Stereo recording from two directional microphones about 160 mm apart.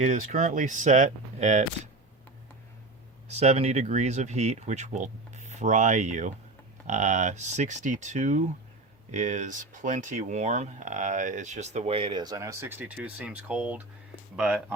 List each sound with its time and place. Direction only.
0.0 s speech: 45° right (ahead or behind)
3.3 s speech: 45° right (ahead or behind); by 14.8 s 5° right (ahead or behind)